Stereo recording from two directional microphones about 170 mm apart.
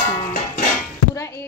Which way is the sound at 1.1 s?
15° left (ahead or behind).